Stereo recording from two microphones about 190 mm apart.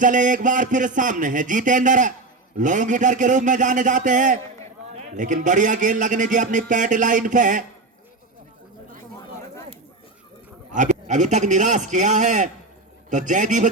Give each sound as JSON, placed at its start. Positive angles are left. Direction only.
{"t": 0.0, "sound": "a man's voice", "side_deg": -40}
{"t": 10.7, "sound": "a man's voice", "side_deg": -40}